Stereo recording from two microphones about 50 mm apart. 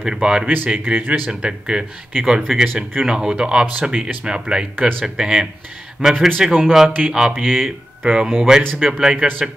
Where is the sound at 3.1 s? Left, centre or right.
Centre.